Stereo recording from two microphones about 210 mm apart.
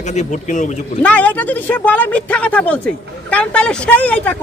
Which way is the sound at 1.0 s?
5° left (ahead or behind).